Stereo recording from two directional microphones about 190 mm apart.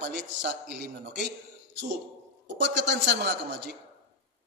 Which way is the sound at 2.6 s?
65° right (ahead or behind).